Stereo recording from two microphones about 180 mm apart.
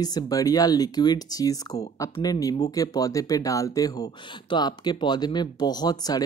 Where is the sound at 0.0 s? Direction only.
20° left (ahead or behind).